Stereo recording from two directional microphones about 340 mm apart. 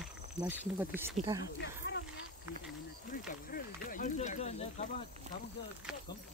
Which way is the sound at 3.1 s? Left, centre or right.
Left.